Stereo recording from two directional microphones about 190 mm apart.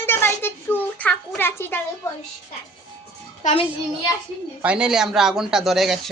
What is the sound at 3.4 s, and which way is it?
Speech, 40° left (ahead or behind).